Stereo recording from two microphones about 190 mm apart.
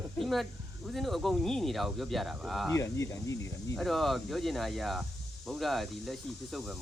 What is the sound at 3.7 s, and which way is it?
Speech, centre (ahead or behind).